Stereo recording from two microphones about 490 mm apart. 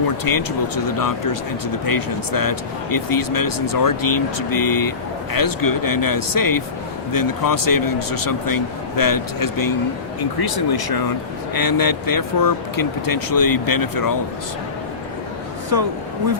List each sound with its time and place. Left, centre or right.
0.3 s speech: left